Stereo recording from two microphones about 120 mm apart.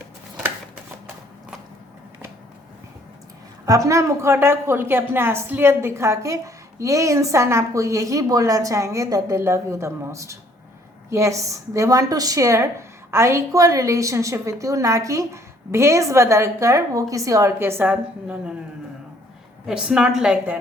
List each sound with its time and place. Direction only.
3.7 s a woman's voice: 25° right (ahead or behind)
17.9 s a woman's voice: 10° right (ahead or behind)
19.6 s a woman's voice: 5° right (ahead or behind)